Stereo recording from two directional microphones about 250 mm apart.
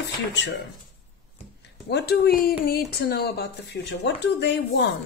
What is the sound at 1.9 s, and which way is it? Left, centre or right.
A woman's voice, left.